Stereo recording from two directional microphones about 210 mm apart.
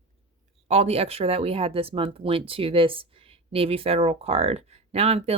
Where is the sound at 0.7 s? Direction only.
30° right (ahead or behind).